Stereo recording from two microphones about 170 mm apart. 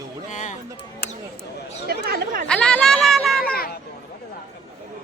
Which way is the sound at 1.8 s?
60° right (ahead or behind).